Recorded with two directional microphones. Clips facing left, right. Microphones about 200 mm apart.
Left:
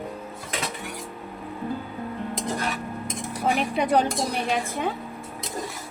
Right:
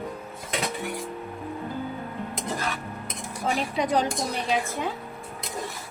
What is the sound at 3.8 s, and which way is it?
Speech, 60° left (ahead or behind).